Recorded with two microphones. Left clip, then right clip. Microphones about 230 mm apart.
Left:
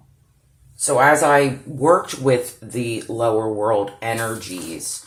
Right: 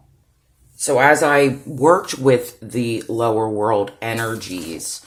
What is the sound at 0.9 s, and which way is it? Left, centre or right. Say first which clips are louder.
Speech: even; right.